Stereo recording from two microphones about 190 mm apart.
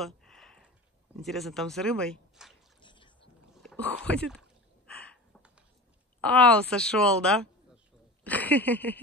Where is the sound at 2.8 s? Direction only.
25° left (ahead or behind).